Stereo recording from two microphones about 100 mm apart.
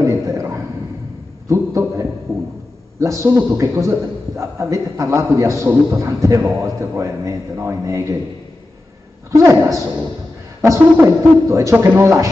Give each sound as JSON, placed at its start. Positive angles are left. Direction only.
{"t": 0.0, "sound": "a sound", "side_deg": -30}
{"t": 1.5, "sound": "a man's voice", "side_deg": -30}
{"t": 9.3, "sound": "a woman's voice", "side_deg": -30}